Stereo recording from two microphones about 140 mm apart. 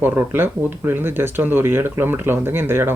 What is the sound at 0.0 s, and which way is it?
Speech, 15° right (ahead or behind).